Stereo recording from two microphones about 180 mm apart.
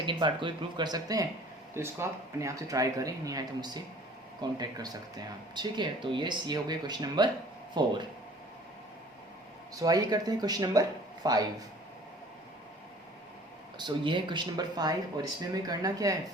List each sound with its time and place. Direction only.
0.0 s speech: 25° right (ahead or behind)
9.8 s speech: 20° right (ahead or behind)
13.7 s speech: 25° right (ahead or behind)